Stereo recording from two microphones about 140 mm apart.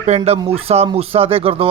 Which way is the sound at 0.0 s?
50° right (ahead or behind).